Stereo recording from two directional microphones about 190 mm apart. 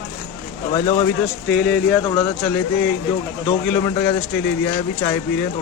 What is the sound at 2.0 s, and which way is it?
Speech, 25° left (ahead or behind).